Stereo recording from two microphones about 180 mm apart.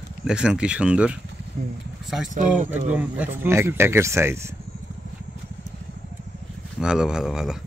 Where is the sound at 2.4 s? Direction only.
45° right (ahead or behind).